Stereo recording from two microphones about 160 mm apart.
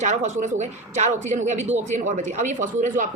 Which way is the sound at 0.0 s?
45° right (ahead or behind).